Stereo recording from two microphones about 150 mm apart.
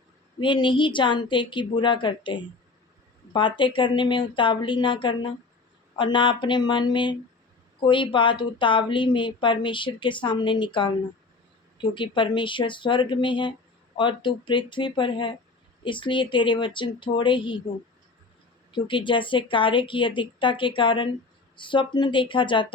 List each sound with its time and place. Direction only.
0.3 s speech: 30° left (ahead or behind)
18.7 s speech: 35° left (ahead or behind)